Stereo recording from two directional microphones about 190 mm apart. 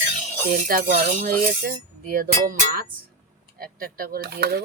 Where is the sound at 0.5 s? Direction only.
45° right (ahead or behind).